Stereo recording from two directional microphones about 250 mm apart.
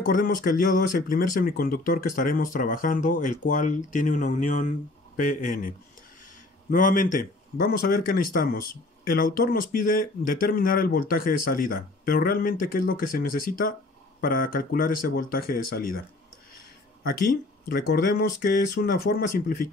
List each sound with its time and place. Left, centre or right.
0.0 s speech: left
17.6 s speech: left